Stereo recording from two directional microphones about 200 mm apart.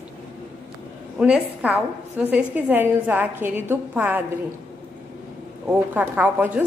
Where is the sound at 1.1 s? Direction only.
5° right (ahead or behind).